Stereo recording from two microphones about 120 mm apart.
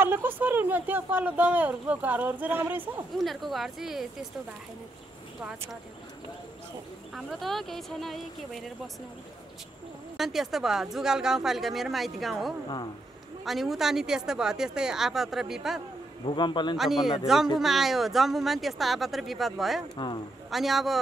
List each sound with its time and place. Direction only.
0.0 s speech: 15° right (ahead or behind)
3.3 s speech: centre (ahead or behind)
5.4 s speech: 10° right (ahead or behind)
7.2 s speech: centre (ahead or behind)
10.1 s speech: centre (ahead or behind)
16.3 s speech: 40° left (ahead or behind)
16.7 s speech: centre (ahead or behind)
20.0 s speech: 40° left (ahead or behind)
20.4 s speech: centre (ahead or behind)